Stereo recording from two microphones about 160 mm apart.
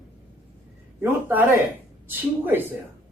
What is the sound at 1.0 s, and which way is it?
Speech, 10° right (ahead or behind).